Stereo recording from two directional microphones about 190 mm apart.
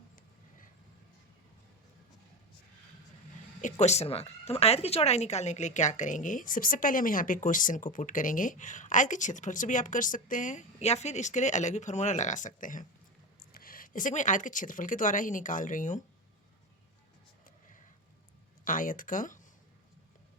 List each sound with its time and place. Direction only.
3.6 s speech: 35° left (ahead or behind)
18.6 s speech: 45° left (ahead or behind)